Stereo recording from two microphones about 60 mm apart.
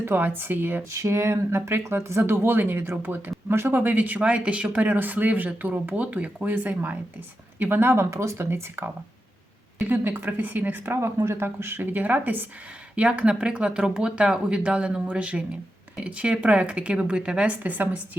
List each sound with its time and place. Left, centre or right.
0.0 s speech: right
0.9 s speech: right
8.1 s speech: right
8.4 s speech: right
11.0 s speech: right
13.0 s speech: centre